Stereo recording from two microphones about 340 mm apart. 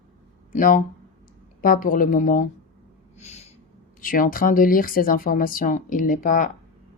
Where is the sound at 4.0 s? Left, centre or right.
Left.